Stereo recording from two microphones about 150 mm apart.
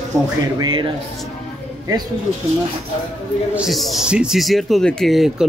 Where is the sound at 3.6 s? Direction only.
Centre (ahead or behind).